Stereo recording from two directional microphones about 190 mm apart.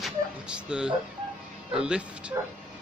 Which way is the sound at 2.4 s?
15° right (ahead or behind).